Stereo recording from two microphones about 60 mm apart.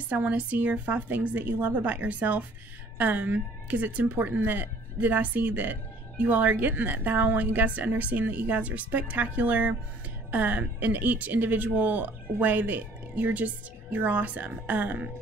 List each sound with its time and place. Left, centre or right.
0.1 s speech: right